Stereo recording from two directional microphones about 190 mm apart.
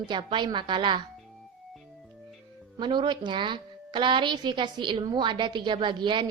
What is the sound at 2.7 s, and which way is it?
A woman's voice, 25° right (ahead or behind).